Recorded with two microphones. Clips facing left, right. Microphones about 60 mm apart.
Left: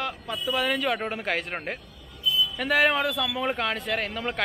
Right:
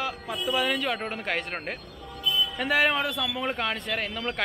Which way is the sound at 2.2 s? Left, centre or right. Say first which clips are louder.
Left 1 dB; right.